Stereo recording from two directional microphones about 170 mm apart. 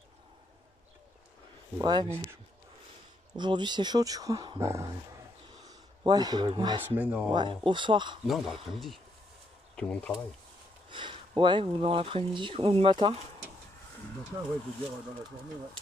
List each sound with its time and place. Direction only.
1.8 s speech: 25° right (ahead or behind)
3.3 s speech: 25° right (ahead or behind)
7.0 s speech: 10° right (ahead or behind)
7.3 s speech: 30° right (ahead or behind)
8.3 s speech: centre (ahead or behind)
9.8 s speech: 5° left (ahead or behind)
10.9 s speech: 30° right (ahead or behind)